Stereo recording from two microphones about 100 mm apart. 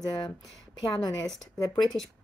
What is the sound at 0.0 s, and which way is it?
Speech, 50° left (ahead or behind).